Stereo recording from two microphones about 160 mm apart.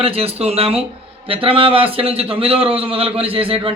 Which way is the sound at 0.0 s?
40° right (ahead or behind).